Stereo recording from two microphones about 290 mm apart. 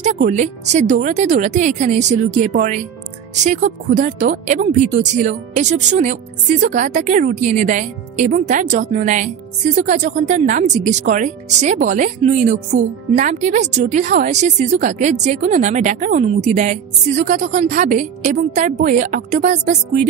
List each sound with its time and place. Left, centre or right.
0.0 s speech: right